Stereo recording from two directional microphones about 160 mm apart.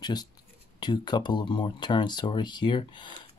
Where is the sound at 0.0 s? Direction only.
25° left (ahead or behind).